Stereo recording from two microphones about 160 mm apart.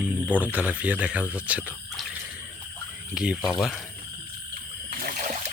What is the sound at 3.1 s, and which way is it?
Speech, 5° right (ahead or behind).